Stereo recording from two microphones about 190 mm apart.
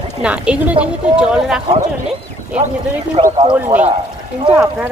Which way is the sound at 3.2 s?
20° right (ahead or behind).